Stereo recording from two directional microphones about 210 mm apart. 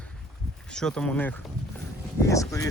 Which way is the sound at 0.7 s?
5° left (ahead or behind).